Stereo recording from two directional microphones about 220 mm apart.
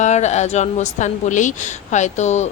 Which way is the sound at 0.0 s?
30° left (ahead or behind).